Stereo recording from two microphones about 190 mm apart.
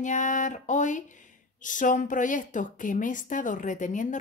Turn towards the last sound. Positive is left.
turn(degrees=40)  # may be behind; listen again after turning